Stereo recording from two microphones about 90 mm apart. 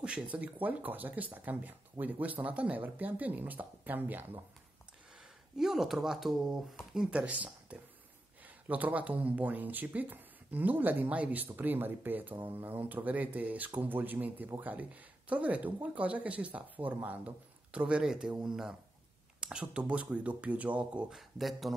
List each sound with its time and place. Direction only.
0.0 s speech: 15° right (ahead or behind)
5.6 s speech: 5° right (ahead or behind)
8.6 s speech: 15° right (ahead or behind); by 21.7 s centre (ahead or behind)